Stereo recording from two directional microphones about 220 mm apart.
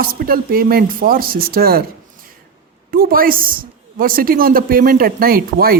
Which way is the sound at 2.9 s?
40° right (ahead or behind).